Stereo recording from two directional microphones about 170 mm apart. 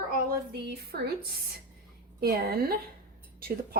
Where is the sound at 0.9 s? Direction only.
65° right (ahead or behind).